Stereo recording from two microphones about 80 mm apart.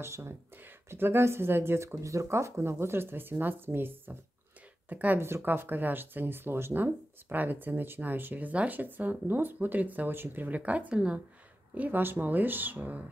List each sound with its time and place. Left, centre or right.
0.0 s speech: right